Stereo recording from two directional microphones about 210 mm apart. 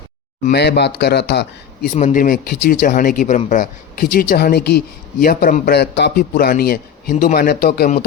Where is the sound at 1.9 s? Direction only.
35° left (ahead or behind).